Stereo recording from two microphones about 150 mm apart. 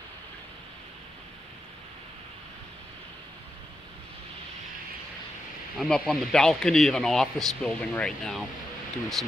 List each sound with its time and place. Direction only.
5.8 s speech: 5° left (ahead or behind)